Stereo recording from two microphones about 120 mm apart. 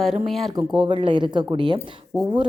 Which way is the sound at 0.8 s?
45° right (ahead or behind).